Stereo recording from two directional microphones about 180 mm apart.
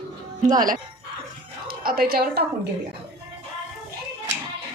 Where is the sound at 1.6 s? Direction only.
55° right (ahead or behind).